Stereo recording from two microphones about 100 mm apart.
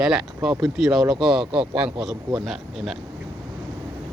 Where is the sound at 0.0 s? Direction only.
5° right (ahead or behind).